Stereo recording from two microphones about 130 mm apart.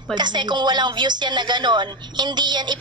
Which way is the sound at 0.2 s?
35° right (ahead or behind).